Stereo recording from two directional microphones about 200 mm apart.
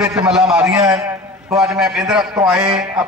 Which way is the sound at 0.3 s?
5° right (ahead or behind).